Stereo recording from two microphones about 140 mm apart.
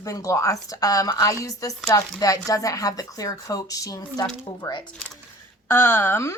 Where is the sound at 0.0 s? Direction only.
25° left (ahead or behind).